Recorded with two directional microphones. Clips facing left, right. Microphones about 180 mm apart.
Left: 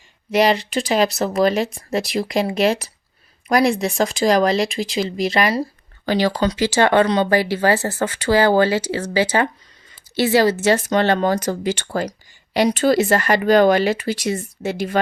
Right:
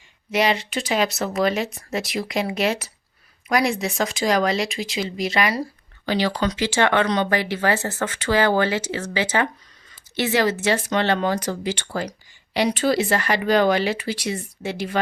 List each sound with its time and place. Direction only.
0.3 s speech: 35° left (ahead or behind)